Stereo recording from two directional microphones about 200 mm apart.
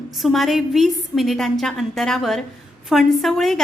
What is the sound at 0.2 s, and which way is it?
A woman's voice, centre (ahead or behind).